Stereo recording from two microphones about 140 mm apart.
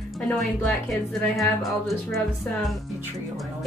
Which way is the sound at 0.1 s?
Centre (ahead or behind).